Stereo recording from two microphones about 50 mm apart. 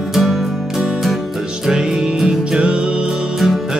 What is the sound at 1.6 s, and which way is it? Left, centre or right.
Music, centre.